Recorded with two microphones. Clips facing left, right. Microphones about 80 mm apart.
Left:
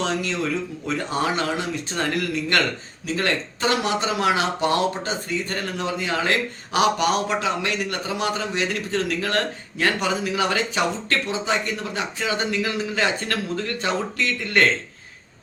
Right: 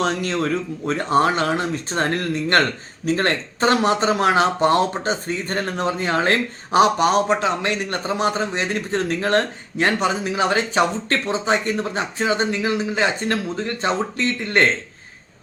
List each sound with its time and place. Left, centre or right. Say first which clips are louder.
0.0 s speech: right 3 dB; right